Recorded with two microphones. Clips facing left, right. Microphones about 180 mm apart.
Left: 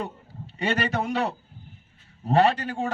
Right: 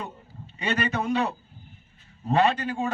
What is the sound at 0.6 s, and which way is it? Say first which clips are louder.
Speech: left 1 dB; 45° left (ahead or behind).